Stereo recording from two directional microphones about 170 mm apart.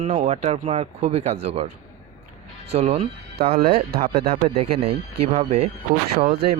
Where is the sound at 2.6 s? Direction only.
35° right (ahead or behind).